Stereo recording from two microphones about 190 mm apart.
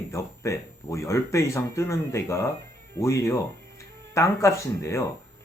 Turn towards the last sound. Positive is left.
turn(degrees=15)  # may be behind; listen again after turning